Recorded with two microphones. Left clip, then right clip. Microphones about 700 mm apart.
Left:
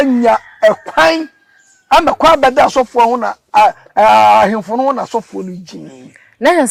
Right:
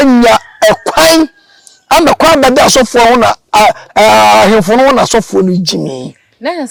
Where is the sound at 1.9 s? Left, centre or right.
Right.